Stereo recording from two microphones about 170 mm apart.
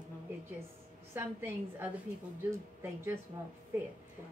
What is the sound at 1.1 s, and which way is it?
A woman's voice, 15° right (ahead or behind).